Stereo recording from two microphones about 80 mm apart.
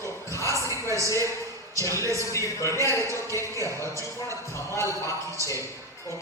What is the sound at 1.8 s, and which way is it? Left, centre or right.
Speech, left.